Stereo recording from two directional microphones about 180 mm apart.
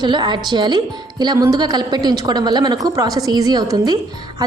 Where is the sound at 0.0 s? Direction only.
25° right (ahead or behind).